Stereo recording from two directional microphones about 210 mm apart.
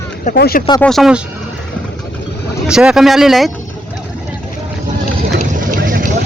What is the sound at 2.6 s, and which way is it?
Speech, 5° right (ahead or behind).